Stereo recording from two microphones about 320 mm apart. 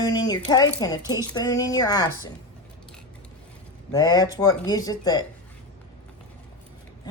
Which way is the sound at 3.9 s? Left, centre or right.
Centre.